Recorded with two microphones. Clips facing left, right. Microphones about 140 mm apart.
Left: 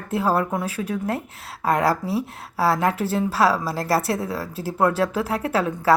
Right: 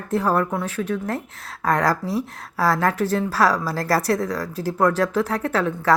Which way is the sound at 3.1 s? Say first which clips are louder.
Even; 5° left (ahead or behind).